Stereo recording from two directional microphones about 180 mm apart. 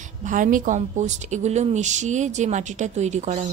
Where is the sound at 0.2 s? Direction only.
45° right (ahead or behind).